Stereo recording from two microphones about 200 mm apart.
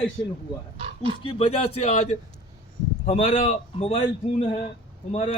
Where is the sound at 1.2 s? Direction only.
25° left (ahead or behind).